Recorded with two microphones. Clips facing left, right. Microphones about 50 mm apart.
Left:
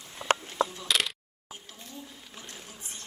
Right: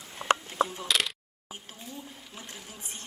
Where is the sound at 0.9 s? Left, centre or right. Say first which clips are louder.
Even; centre.